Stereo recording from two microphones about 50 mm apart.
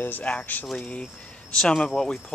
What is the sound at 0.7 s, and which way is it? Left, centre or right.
Speech, left.